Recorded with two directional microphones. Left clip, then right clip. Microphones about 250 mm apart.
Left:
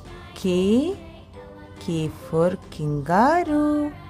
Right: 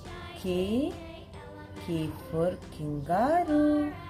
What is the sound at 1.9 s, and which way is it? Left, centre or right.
Speech, left.